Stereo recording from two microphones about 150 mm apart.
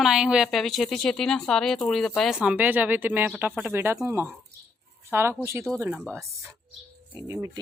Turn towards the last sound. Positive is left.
turn(degrees=-20)  # may be behind; listen again after turning